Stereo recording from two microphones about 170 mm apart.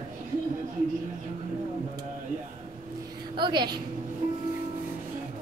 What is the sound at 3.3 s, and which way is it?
Speech, 25° right (ahead or behind).